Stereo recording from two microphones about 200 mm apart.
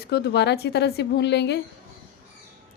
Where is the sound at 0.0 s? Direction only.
55° left (ahead or behind).